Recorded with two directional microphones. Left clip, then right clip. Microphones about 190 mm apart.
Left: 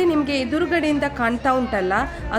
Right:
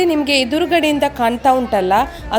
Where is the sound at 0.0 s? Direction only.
20° right (ahead or behind).